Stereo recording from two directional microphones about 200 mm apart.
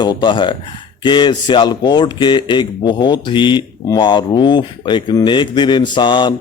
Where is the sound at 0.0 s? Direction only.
20° left (ahead or behind).